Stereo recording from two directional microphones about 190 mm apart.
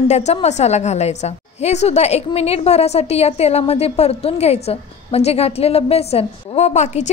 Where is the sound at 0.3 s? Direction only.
35° left (ahead or behind).